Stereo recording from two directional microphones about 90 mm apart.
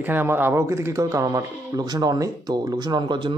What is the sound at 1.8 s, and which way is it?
Speech, 50° right (ahead or behind).